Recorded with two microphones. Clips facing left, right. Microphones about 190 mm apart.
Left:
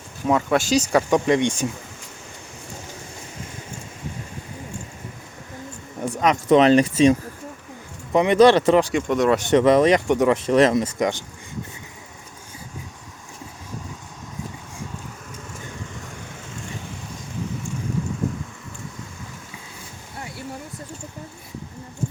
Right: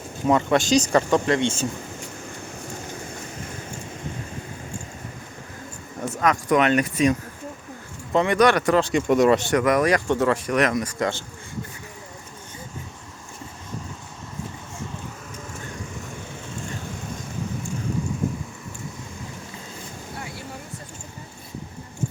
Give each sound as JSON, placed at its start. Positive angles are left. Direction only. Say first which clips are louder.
{"t": 0.3, "sound": "speech", "louder": "right 1 dB", "side_deg": 5}
{"t": 6.0, "sound": "speech", "louder": "left 2 dB", "side_deg": 20}
{"t": 8.8, "sound": "speech", "louder": "right 2 dB", "side_deg": 5}
{"t": 9.5, "sound": "speech", "louder": "left 4 dB", "side_deg": 25}